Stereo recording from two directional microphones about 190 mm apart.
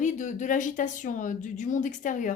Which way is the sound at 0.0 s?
40° left (ahead or behind).